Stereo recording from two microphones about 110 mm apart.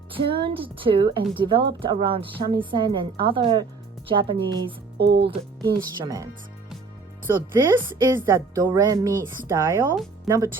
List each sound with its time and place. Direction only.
0.1 s speech: 50° right (ahead or behind)
5.6 s speech: 30° right (ahead or behind)
7.3 s speech: 20° right (ahead or behind)